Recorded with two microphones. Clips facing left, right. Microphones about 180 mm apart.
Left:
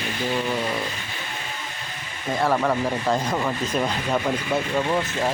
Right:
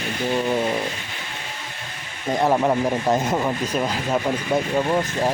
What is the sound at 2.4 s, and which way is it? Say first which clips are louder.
Speech: right 3 dB; 20° right (ahead or behind).